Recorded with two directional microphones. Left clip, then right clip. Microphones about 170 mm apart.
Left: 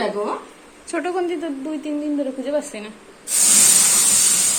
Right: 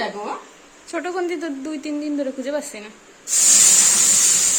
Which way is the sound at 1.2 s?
30° right (ahead or behind).